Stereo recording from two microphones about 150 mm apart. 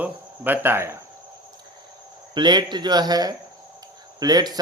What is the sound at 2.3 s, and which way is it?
Speech, 30° right (ahead or behind).